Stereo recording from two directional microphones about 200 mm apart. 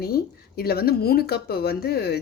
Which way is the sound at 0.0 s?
50° left (ahead or behind).